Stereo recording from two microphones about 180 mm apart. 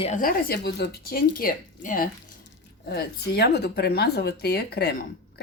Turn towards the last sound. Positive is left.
turn(degrees=60)  # may be behind; listen again after turning